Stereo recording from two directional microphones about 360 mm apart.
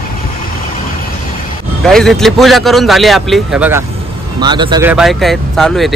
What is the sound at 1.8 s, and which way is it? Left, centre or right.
A man's voice, centre.